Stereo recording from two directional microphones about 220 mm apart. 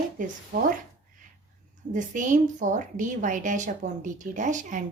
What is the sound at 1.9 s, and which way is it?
A woman's voice, 35° right (ahead or behind).